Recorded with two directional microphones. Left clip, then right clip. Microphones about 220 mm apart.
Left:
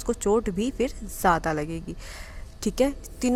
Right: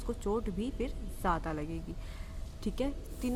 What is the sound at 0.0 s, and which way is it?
A woman's voice, 35° left (ahead or behind).